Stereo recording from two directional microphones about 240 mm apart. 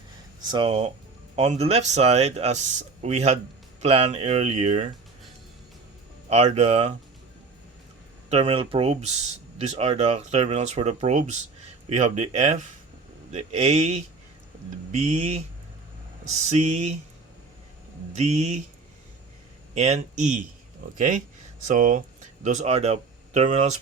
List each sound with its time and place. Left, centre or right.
0.4 s speech: centre
6.2 s speech: right
8.3 s speech: right
16.5 s speech: right
18.1 s speech: right
19.7 s speech: right